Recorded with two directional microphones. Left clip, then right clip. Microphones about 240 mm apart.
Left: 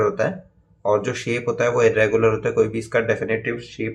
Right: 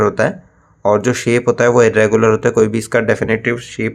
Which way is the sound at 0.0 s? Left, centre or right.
Right.